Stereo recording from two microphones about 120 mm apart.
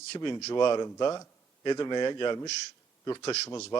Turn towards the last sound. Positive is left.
turn(degrees=25)  # may be behind; listen again after turning